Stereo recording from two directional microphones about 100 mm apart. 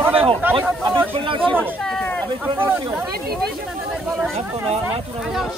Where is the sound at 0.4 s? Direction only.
20° right (ahead or behind).